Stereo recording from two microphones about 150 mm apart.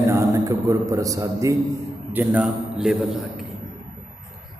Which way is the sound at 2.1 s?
10° right (ahead or behind).